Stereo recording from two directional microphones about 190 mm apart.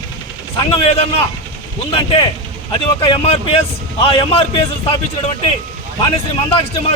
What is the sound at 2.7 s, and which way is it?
Speech, 25° left (ahead or behind).